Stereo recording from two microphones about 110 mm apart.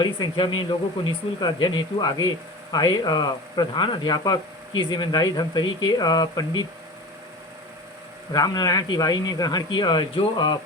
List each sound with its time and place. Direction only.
0.0 s speech: 45° left (ahead or behind)
8.3 s speech: 35° left (ahead or behind)